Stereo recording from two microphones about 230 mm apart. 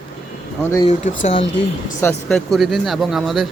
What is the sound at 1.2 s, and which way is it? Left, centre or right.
Speech, left.